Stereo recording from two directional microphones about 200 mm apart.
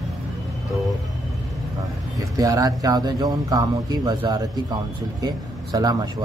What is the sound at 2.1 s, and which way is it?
Speech, 15° right (ahead or behind).